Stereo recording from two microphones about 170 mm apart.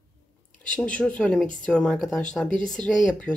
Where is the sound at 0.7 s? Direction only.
5° left (ahead or behind).